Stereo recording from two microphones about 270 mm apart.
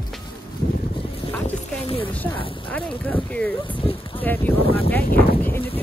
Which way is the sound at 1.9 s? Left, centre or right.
Centre.